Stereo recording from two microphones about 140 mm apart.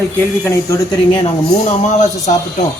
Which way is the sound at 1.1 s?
50° left (ahead or behind).